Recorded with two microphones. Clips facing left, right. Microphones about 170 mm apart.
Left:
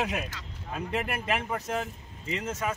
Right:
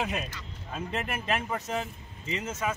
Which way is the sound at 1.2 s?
5° left (ahead or behind).